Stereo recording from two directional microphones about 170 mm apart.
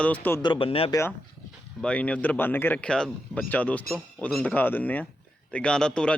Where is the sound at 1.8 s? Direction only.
5° left (ahead or behind).